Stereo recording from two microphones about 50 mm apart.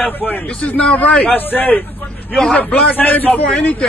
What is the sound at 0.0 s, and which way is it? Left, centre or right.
Speech, left.